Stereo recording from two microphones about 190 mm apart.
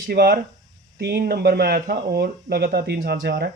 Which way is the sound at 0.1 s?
60° right (ahead or behind).